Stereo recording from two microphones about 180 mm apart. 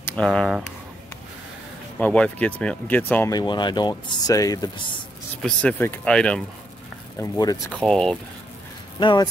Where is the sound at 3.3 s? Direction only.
25° left (ahead or behind).